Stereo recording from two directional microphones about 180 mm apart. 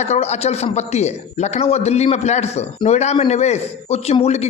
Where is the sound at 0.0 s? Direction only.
40° left (ahead or behind).